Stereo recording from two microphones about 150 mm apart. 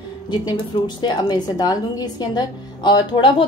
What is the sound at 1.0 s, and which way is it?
A woman's voice, 30° left (ahead or behind).